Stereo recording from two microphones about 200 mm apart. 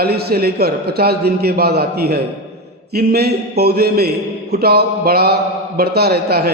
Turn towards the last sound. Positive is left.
turn(degrees=-50)  # may be behind; listen again after turning